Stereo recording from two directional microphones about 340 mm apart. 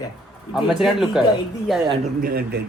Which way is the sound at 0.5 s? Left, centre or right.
Centre.